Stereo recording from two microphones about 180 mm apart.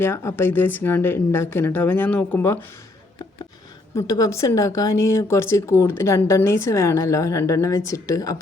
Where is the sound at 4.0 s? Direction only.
15° left (ahead or behind).